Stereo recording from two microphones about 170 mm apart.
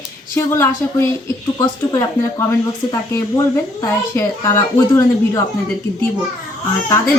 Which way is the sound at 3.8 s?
15° left (ahead or behind).